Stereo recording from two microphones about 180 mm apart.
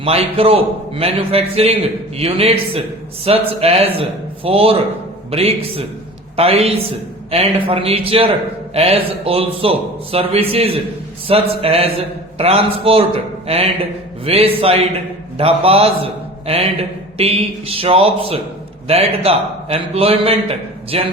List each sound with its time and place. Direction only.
0.0 s a man's voice: 35° right (ahead or behind)